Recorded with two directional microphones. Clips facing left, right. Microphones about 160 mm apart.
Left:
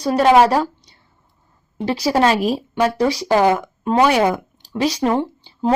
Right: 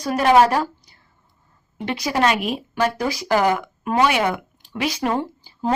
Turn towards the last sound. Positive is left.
turn(degrees=30)  # may be behind; listen again after turning